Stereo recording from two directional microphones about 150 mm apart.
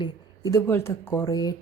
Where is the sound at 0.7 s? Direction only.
15° left (ahead or behind).